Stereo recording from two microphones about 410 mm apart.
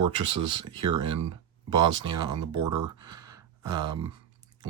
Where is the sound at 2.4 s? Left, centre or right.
Right.